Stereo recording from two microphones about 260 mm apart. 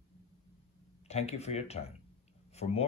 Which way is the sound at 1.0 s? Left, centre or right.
Left.